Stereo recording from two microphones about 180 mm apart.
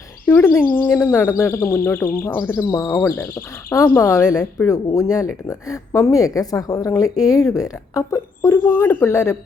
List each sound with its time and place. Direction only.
0.3 s speech: 15° left (ahead or behind)